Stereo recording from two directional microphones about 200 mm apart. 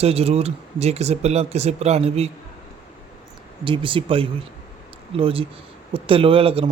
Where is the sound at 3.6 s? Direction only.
25° right (ahead or behind).